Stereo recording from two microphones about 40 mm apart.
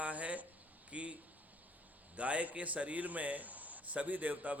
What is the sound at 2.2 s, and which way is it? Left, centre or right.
Speech, right.